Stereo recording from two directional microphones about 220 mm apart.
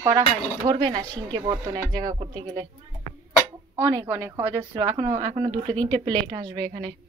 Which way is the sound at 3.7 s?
10° right (ahead or behind).